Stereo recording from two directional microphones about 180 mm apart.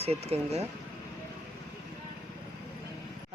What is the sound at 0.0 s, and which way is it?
Speech, 35° right (ahead or behind).